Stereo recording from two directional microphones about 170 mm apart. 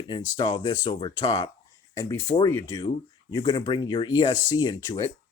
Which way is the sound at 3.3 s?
25° left (ahead or behind).